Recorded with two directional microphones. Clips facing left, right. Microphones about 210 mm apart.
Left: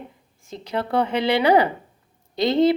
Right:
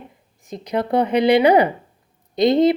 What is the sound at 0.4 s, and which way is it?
A woman's voice, 15° right (ahead or behind).